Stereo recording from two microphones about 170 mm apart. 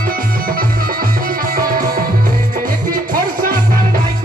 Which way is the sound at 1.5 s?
55° right (ahead or behind).